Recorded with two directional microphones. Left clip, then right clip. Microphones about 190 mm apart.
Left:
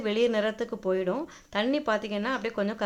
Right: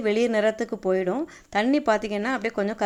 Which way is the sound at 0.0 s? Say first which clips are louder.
Right 4 dB; 25° right (ahead or behind).